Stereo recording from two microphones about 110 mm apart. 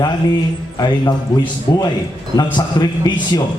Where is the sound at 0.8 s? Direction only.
45° left (ahead or behind).